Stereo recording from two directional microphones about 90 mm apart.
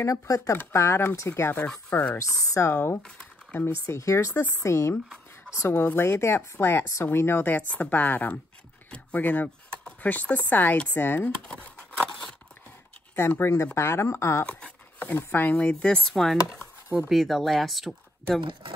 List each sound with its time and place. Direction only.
0.0 s speech: 35° left (ahead or behind)
1.6 s a woman's voice: 15° left (ahead or behind)
2.1 s speech: 35° left (ahead or behind)
2.7 s speech: 25° left (ahead or behind)
3.8 s speech: 35° left (ahead or behind)
4.3 s a woman's voice: 25° left (ahead or behind)
11.4 s scissors: 15° left (ahead or behind)
13.1 s speech: 25° left (ahead or behind)
14.4 s speech: 15° left (ahead or behind)
15.7 s speech: 10° left (ahead or behind)
18.4 s speech: 65° right (ahead or behind)